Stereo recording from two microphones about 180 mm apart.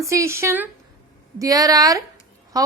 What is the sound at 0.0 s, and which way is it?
A woman's voice, 15° right (ahead or behind).